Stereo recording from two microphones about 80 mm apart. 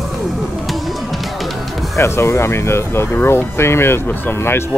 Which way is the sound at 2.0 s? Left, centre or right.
Left.